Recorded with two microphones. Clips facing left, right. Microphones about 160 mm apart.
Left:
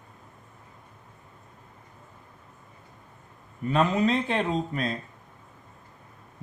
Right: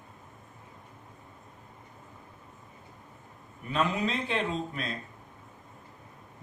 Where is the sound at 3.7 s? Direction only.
45° left (ahead or behind).